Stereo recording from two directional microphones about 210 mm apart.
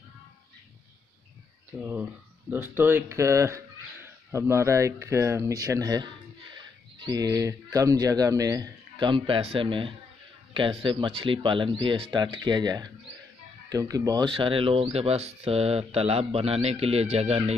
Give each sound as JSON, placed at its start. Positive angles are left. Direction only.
{"t": 1.8, "sound": "speech", "side_deg": -5}